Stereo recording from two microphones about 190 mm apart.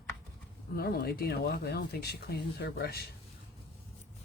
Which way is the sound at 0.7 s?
55° left (ahead or behind).